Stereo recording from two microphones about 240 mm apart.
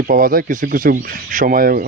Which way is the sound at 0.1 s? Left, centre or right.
Right.